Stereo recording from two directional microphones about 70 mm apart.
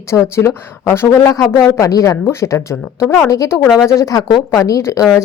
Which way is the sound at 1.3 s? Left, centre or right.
Left.